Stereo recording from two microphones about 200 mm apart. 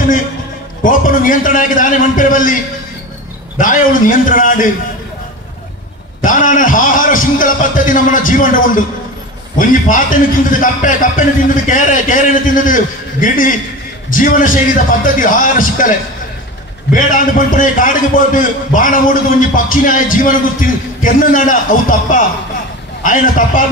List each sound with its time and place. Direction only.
0.8 s a man's voice: 40° left (ahead or behind)
6.2 s a man's voice: 40° left (ahead or behind)
16.9 s a man's voice: 40° left (ahead or behind)